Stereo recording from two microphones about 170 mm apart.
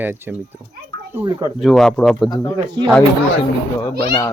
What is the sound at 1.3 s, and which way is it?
Speech, 25° right (ahead or behind).